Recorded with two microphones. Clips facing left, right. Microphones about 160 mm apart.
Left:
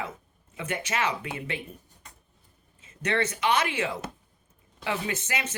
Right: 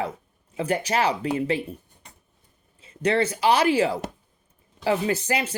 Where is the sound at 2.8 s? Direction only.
30° right (ahead or behind).